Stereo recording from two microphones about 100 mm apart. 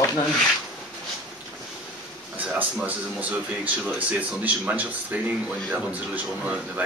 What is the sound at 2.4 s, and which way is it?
Speech, 15° right (ahead or behind).